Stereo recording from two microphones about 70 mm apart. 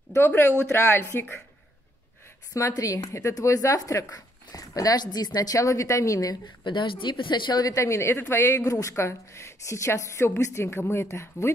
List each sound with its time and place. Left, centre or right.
0.2 s a woman's voice: left
2.5 s speech: left
7.1 s a woman's voice: left
7.7 s a woman's voice: left